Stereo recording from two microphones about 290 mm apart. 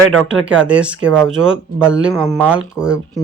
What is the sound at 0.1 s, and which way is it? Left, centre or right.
Speech, centre.